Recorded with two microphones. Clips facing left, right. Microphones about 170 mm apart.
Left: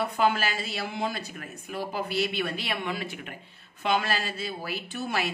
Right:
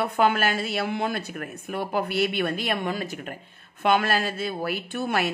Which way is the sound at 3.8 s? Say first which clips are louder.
Right 5 dB; 55° right (ahead or behind).